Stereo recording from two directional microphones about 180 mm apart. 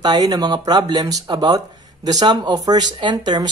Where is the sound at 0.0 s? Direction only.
20° right (ahead or behind).